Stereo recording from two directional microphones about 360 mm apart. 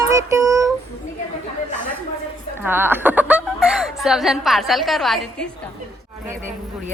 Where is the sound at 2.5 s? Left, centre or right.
Centre.